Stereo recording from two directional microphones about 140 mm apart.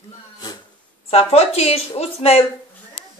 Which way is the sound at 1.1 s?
45° left (ahead or behind).